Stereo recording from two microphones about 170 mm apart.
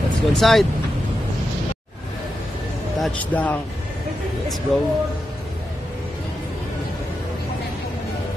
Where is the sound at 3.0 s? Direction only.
10° left (ahead or behind).